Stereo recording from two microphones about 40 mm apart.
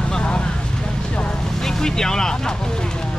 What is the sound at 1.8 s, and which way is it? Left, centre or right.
Speech, centre.